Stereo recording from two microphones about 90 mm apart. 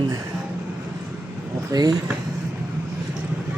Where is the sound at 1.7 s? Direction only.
50° right (ahead or behind).